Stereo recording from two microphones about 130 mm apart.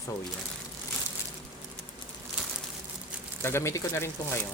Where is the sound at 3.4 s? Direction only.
20° left (ahead or behind).